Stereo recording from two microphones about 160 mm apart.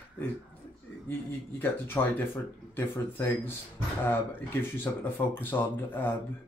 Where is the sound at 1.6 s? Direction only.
15° left (ahead or behind).